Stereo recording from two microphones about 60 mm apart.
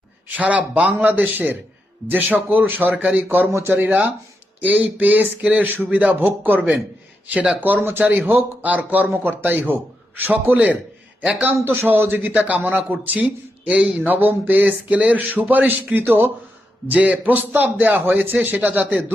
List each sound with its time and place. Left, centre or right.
0.3 s speech: right
2.9 s speech: centre
3.2 s speech: right
4.6 s speech: right
11.6 s speech: right; by 14.0 s centre
14.0 s speech: right